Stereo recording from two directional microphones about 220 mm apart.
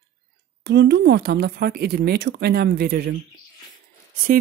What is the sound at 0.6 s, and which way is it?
Speech, 50° right (ahead or behind).